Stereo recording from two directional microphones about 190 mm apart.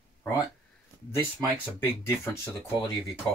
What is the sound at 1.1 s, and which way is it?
Speech, 10° left (ahead or behind).